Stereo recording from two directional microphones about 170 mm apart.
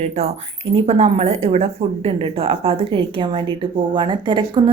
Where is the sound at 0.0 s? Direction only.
40° right (ahead or behind).